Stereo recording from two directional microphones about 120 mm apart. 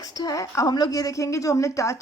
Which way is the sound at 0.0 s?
30° left (ahead or behind).